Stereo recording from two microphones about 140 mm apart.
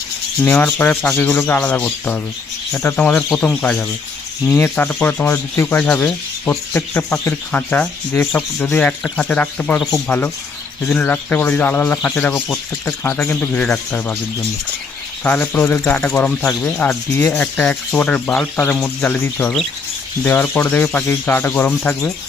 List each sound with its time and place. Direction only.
0.4 s speech: 10° left (ahead or behind)
15.2 s speech: 15° left (ahead or behind)